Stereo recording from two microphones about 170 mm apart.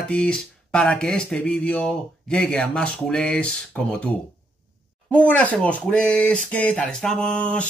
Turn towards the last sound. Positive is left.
turn(degrees=5)  # may be behind; listen again after turning